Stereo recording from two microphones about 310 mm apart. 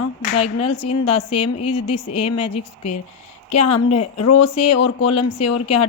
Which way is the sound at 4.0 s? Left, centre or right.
Left.